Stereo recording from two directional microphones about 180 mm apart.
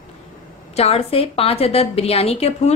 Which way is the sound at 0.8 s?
35° left (ahead or behind).